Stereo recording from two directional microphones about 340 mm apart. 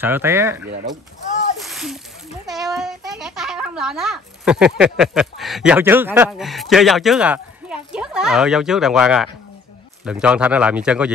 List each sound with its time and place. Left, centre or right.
0.0 s speech: centre
1.6 s a sound: centre
2.4 s a child's voice: centre